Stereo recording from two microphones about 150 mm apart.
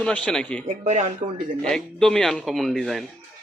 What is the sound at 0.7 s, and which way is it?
Speech, 50° right (ahead or behind).